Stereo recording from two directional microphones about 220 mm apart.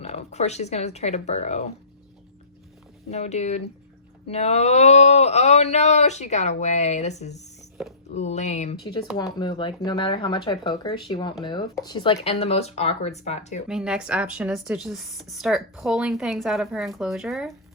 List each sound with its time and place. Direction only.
0.0 s speech: 30° left (ahead or behind)
3.1 s speech: 30° left (ahead or behind)
9.1 s speech: 20° left (ahead or behind)
13.7 s speech: 5° right (ahead or behind)